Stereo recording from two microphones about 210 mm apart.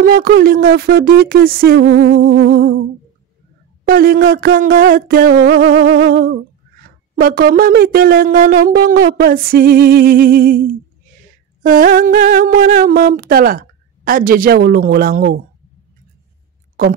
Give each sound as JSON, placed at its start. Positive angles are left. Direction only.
{"t": 0.0, "sound": "speech", "side_deg": -45}
{"t": 1.8, "sound": "speech", "side_deg": -60}
{"t": 3.8, "sound": "speech", "side_deg": -45}
{"t": 11.6, "sound": "speech", "side_deg": -40}
{"t": 16.8, "sound": "speech", "side_deg": -40}